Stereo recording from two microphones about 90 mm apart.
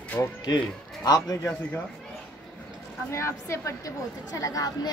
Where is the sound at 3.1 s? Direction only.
30° left (ahead or behind).